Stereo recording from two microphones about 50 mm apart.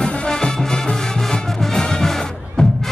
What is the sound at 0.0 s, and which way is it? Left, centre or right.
Music, centre.